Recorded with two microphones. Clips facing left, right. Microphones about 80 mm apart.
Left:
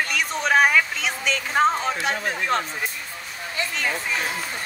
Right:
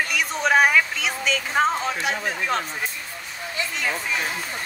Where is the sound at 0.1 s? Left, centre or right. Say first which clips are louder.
Right 1 dB; centre.